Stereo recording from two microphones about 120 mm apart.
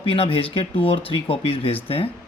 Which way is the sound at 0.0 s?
50° left (ahead or behind).